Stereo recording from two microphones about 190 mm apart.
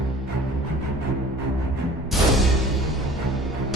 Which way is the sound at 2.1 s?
Centre (ahead or behind).